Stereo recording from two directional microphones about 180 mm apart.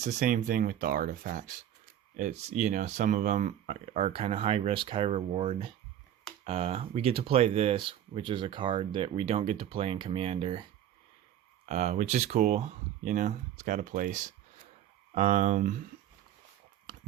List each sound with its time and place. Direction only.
0.0 s speech: 40° right (ahead or behind)
11.6 s speech: 40° right (ahead or behind)